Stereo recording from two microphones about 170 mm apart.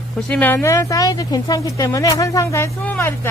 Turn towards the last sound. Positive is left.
turn(degrees=10)  # may be behind; listen again after turning